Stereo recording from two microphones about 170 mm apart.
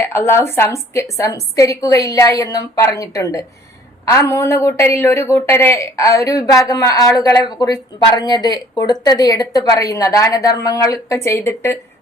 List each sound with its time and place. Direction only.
0.0 s a woman's voice: 15° left (ahead or behind)